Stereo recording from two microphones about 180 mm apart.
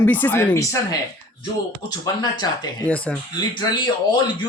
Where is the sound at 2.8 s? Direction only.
10° left (ahead or behind).